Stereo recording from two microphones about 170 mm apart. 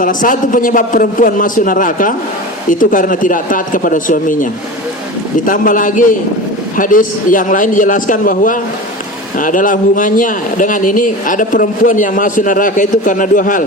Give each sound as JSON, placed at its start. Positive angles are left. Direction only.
{"t": 0.0, "sound": "speech", "side_deg": 50}
{"t": 5.5, "sound": "speech", "side_deg": 50}